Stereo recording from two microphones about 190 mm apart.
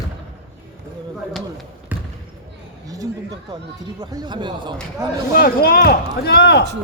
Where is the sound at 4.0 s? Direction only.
20° right (ahead or behind).